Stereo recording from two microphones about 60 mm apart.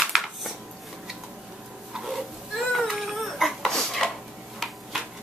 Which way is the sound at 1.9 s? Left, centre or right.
Centre.